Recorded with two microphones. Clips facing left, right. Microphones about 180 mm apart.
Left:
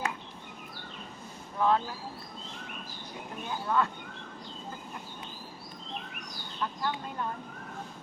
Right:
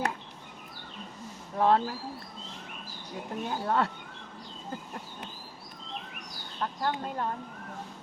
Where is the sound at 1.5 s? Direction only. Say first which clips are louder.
Right 3 dB; 35° right (ahead or behind).